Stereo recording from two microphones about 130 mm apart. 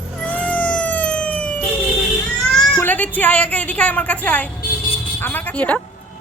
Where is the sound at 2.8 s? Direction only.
10° left (ahead or behind).